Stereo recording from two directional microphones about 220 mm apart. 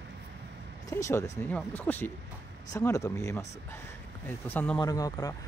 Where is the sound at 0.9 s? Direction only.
10° left (ahead or behind).